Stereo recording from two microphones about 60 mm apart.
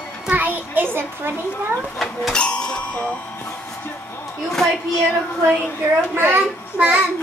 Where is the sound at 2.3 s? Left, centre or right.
Centre.